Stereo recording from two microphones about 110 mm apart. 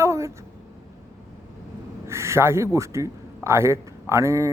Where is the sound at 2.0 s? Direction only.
25° right (ahead or behind).